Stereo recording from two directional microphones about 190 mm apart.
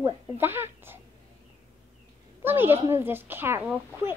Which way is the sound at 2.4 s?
10° right (ahead or behind).